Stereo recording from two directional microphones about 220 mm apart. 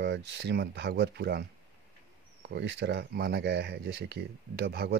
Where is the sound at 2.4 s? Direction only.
50° right (ahead or behind).